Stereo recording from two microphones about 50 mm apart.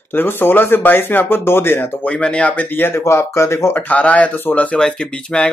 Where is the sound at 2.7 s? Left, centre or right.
Left.